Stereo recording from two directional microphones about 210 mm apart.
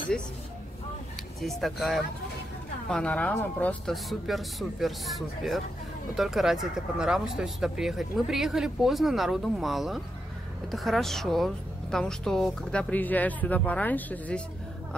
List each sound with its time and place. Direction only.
1.4 s speech: centre (ahead or behind)